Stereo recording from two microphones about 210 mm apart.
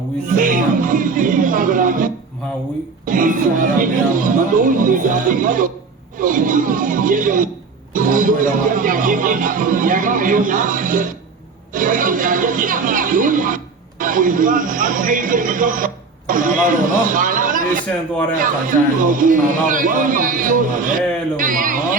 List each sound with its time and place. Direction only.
0.3 s speech: 40° right (ahead or behind)
3.1 s speech: 40° right (ahead or behind)